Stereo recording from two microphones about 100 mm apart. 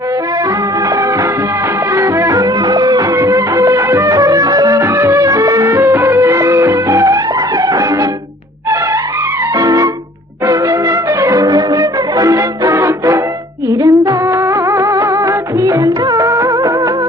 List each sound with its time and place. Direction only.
2.0 s music: 35° right (ahead or behind)
9.6 s music: 35° right (ahead or behind)